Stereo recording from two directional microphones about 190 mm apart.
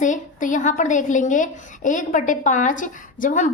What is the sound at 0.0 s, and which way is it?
A woman's voice, 45° left (ahead or behind).